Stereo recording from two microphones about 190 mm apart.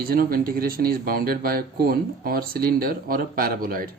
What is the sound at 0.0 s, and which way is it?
Speech, 50° right (ahead or behind).